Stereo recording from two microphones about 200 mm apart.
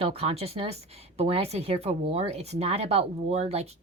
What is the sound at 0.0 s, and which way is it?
A woman's voice, 30° right (ahead or behind).